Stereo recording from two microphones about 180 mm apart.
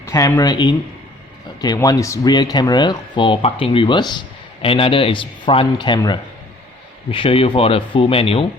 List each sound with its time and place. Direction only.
0.0 s speech: 15° left (ahead or behind)